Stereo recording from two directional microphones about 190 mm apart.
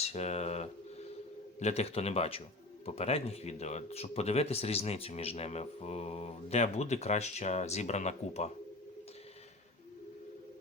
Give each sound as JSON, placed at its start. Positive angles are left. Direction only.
{"t": 0.0, "sound": "speech", "side_deg": 35}